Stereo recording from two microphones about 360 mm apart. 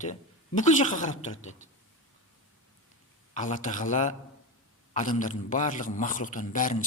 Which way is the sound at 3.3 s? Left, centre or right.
Centre.